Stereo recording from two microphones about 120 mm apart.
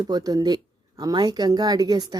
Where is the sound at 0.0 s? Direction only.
30° right (ahead or behind).